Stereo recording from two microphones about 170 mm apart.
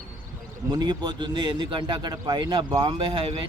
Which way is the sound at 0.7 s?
25° right (ahead or behind).